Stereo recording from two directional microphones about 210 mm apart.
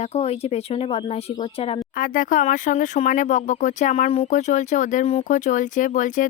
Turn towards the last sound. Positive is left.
turn(degrees=40)  # may be behind; listen again after turning